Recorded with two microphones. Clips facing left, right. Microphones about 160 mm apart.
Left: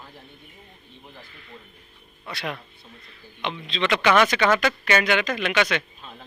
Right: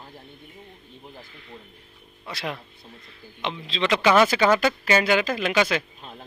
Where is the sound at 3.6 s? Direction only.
25° right (ahead or behind).